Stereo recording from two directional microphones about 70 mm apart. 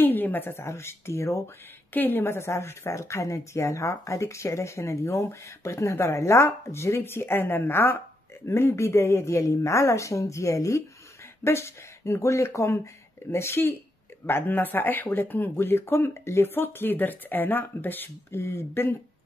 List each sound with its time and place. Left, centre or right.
0.0 s speech: left
2.0 s speech: left